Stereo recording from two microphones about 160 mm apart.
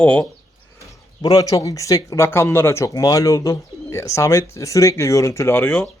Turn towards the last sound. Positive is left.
turn(degrees=15)  # may be behind; listen again after turning